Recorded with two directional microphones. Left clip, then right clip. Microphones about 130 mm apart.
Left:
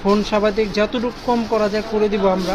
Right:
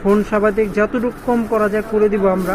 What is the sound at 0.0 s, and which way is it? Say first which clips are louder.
Speech: right 2 dB; 20° left (ahead or behind).